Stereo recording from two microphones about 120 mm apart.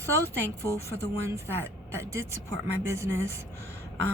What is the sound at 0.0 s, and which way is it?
Speech, 20° left (ahead or behind).